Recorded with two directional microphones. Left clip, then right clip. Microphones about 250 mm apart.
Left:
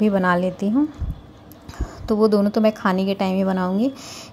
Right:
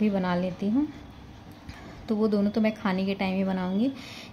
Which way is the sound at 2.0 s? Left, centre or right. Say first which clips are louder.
Left 9 dB; centre.